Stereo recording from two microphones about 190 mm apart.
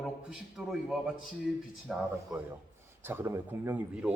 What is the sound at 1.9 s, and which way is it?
A man's voice, 5° right (ahead or behind).